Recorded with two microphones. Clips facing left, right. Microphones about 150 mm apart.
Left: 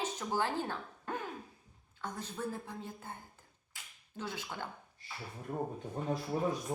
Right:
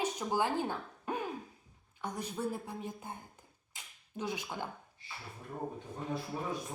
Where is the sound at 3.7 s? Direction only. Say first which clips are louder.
Right 4 dB; 15° right (ahead or behind).